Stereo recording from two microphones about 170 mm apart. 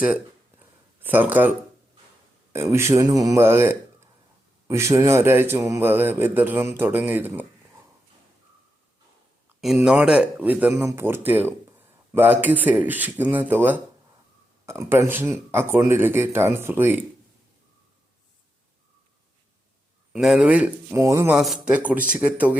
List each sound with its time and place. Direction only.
0.9 s a man's voice: 10° right (ahead or behind)
9.7 s a man's voice: 5° right (ahead or behind)
20.1 s a man's voice: 5° right (ahead or behind)
21.3 s a man's voice: 5° right (ahead or behind)